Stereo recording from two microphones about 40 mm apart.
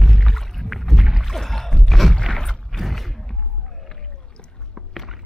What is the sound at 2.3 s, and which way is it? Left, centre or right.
Mechanisms, centre.